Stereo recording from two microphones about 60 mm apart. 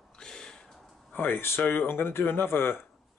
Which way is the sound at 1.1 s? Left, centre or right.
Left.